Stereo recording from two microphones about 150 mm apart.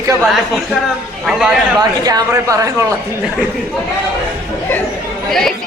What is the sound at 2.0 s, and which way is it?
Speech, 25° right (ahead or behind).